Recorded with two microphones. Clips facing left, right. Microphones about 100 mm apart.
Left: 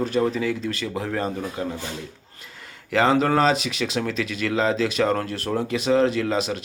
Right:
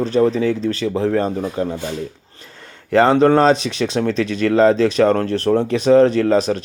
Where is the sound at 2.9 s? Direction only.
35° right (ahead or behind).